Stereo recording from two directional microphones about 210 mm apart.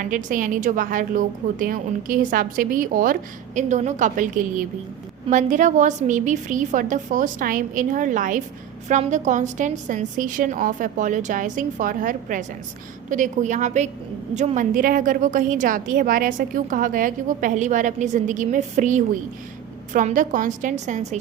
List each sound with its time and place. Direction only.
0.0 s a woman's voice: 40° right (ahead or behind)